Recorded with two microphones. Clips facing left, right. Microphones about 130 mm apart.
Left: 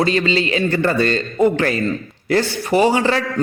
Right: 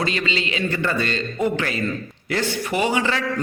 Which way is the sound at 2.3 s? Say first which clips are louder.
Left 6 dB; 35° left (ahead or behind).